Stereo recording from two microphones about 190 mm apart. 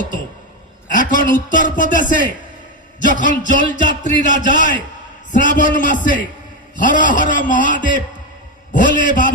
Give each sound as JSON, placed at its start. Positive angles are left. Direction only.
{"t": 0.9, "sound": "a man's voice", "side_deg": 45}